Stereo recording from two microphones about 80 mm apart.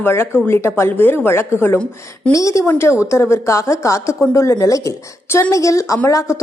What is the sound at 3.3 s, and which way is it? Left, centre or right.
A woman's voice, left.